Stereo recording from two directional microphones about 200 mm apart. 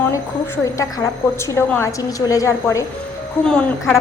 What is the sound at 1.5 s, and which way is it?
A woman's voice, 10° left (ahead or behind).